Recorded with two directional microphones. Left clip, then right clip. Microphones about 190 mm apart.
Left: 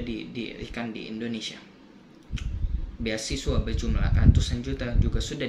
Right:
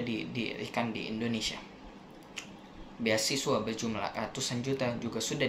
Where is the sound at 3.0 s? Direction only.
15° left (ahead or behind).